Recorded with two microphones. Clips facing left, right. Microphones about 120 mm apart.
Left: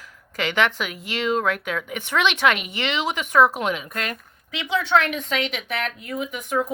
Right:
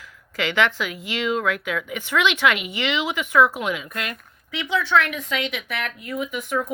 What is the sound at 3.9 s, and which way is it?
Speech, 35° left (ahead or behind).